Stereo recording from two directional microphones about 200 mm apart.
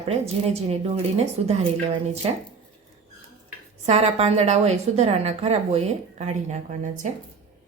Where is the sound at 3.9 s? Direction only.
30° right (ahead or behind).